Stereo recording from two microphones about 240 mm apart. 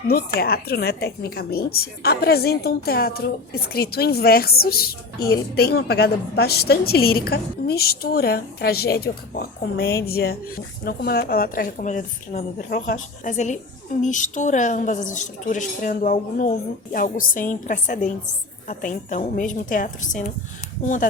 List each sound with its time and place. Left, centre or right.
0.1 s a woman's voice: left